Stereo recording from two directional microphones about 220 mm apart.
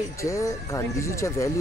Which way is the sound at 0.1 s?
15° left (ahead or behind).